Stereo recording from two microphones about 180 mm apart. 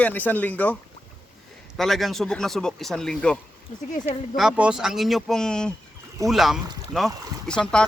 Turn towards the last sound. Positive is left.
turn(degrees=5)  # may be behind; listen again after turning